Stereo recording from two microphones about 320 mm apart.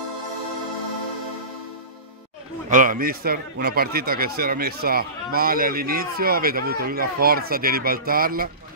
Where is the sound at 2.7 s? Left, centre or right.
Right.